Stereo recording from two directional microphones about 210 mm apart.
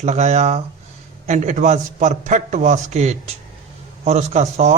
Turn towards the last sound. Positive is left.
turn(degrees=-35)  # may be behind; listen again after turning